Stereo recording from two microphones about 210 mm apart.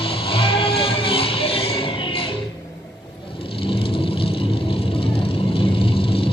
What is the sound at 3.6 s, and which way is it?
Vehicle, 25° left (ahead or behind).